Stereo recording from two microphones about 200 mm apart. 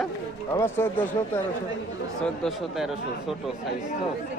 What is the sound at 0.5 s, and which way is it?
Speech, 10° left (ahead or behind).